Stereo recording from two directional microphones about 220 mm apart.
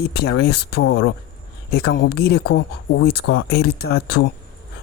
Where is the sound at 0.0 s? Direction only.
45° left (ahead or behind).